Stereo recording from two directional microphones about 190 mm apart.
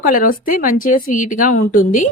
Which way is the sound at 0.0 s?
45° left (ahead or behind).